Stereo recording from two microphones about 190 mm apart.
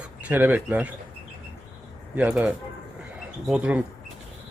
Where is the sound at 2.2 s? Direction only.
10° right (ahead or behind).